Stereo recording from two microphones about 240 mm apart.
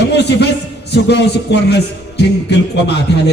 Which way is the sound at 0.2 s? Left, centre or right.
Left.